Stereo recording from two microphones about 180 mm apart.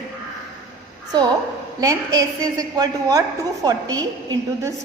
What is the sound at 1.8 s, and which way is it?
A woman's voice, 20° right (ahead or behind).